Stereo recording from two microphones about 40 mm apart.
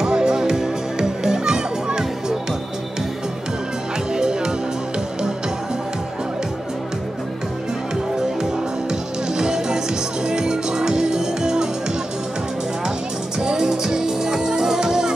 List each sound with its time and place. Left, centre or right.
0.0 s music: centre
4.1 s music: centre
9.3 s music: centre
13.4 s music: centre